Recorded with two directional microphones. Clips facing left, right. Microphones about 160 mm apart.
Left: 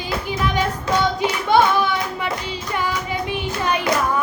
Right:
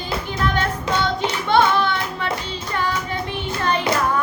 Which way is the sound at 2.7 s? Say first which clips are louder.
Even; 10° left (ahead or behind).